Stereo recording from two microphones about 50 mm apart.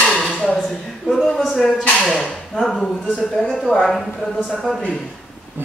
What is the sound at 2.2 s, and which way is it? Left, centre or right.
Speech, centre.